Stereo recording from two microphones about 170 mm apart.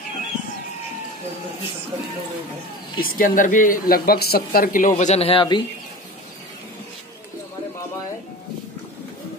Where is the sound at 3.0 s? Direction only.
55° left (ahead or behind); by 5.6 s 30° left (ahead or behind).